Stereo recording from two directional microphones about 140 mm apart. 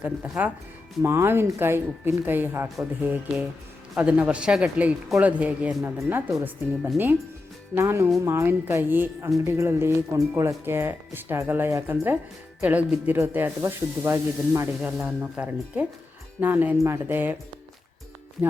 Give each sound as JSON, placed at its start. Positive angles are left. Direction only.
{"t": 0.0, "sound": "speech", "side_deg": -10}
{"t": 14.8, "sound": "speech", "side_deg": -5}